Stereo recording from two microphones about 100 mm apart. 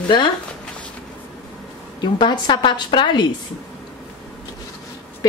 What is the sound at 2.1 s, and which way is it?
Speech, 50° left (ahead or behind).